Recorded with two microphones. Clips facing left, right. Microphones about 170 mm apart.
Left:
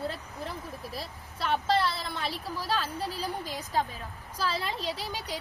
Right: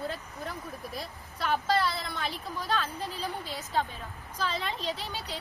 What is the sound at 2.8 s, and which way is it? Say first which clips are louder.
Speech: left 1 dB; 10° left (ahead or behind).